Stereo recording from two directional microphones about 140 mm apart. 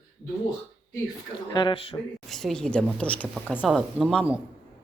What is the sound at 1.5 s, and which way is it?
Speech, 35° left (ahead or behind).